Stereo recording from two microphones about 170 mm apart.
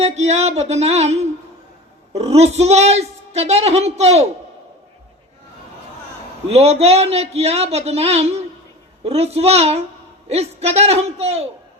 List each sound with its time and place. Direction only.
0.0 s a woman's voice: 40° right (ahead or behind)
6.5 s a woman's voice: 40° right (ahead or behind)